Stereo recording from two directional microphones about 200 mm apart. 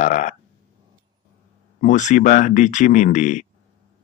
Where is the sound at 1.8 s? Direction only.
40° left (ahead or behind).